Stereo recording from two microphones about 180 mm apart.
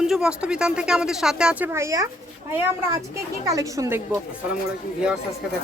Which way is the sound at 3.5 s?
20° right (ahead or behind).